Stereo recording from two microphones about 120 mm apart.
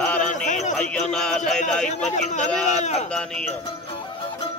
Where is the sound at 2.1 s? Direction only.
75° left (ahead or behind).